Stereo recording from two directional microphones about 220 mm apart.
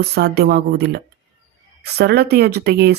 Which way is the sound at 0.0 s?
50° right (ahead or behind).